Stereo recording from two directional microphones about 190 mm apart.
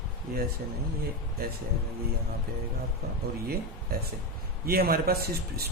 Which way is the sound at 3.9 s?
50° right (ahead or behind).